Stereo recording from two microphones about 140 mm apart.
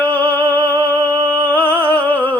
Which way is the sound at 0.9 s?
25° right (ahead or behind).